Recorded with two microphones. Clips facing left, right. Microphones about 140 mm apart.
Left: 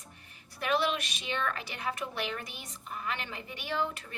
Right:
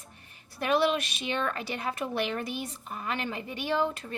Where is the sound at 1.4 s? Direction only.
30° right (ahead or behind).